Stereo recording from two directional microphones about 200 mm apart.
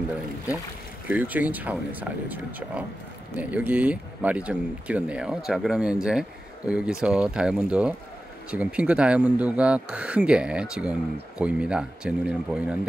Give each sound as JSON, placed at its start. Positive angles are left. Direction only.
{"t": 1.0, "sound": "speech", "side_deg": -10}